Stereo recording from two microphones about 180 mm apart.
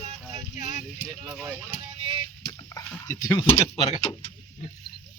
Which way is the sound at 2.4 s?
20° left (ahead or behind).